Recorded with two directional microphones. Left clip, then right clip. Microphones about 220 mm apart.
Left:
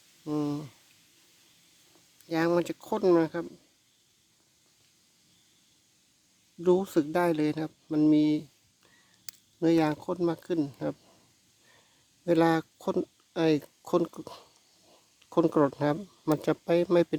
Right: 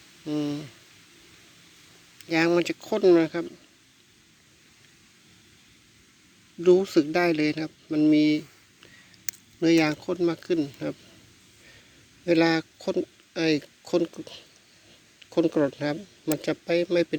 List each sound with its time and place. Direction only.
0.3 s speech: 20° left (ahead or behind)
2.3 s speech: 15° left (ahead or behind)
6.6 s speech: 20° left (ahead or behind)
9.6 s speech: 15° left (ahead or behind)
12.2 s speech: 20° left (ahead or behind)
15.2 s speech: 25° left (ahead or behind)